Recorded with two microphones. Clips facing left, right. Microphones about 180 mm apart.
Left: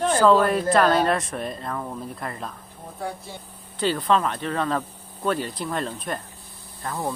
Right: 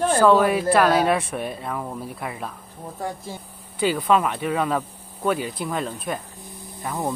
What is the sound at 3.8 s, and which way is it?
Speech, 10° right (ahead or behind).